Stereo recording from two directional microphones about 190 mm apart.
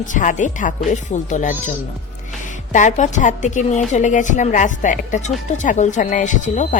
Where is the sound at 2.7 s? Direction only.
40° left (ahead or behind).